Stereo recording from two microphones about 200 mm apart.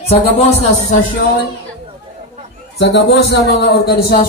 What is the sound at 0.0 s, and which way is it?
Speech, 30° left (ahead or behind).